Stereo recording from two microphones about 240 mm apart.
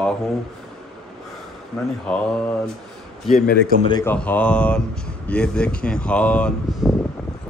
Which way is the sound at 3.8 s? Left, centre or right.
Centre.